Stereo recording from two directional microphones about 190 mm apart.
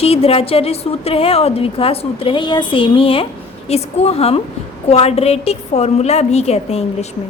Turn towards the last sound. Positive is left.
turn(degrees=35)  # may be behind; listen again after turning